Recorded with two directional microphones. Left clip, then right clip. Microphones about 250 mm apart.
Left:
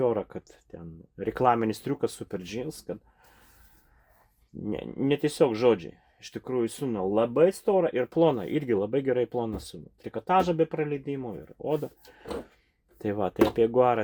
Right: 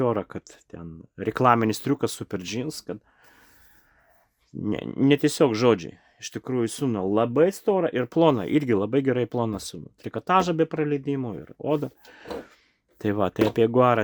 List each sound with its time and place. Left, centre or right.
0.0 s speech: right
4.6 s speech: right